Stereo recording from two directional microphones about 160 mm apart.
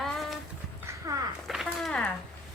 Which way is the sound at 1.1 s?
20° right (ahead or behind).